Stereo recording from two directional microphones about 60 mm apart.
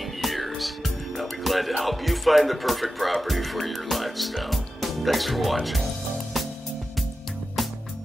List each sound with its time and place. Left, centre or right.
0.2 s speech: centre